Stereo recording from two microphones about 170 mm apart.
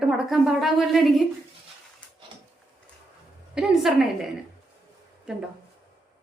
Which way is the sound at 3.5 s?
5° right (ahead or behind).